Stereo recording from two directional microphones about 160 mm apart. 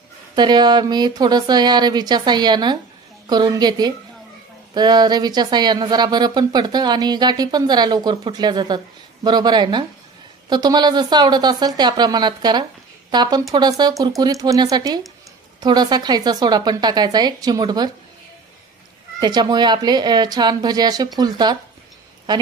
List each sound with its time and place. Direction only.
0.4 s speech: 25° right (ahead or behind)
19.1 s speech: 25° right (ahead or behind)